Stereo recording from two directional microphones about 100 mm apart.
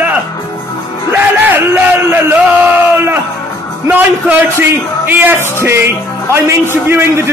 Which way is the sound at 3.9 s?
15° right (ahead or behind).